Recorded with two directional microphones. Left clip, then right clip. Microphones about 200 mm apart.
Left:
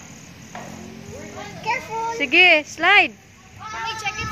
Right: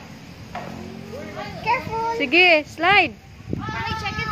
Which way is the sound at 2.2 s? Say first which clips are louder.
Left 2 dB; 5° left (ahead or behind).